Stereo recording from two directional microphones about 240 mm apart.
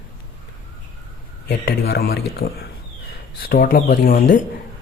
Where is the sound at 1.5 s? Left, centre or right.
Left.